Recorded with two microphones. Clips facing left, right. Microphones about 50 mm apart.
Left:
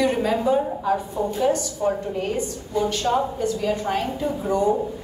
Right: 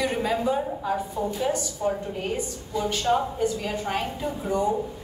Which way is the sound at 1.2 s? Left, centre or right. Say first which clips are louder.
Left 3 dB; left.